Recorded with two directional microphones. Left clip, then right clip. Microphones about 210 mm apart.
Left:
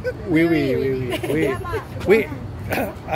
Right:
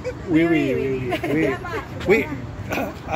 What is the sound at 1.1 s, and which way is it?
Speech, 50° left (ahead or behind).